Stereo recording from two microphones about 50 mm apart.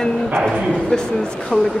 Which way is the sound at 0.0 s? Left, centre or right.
Centre.